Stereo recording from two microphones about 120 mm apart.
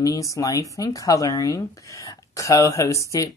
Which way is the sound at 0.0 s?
30° left (ahead or behind).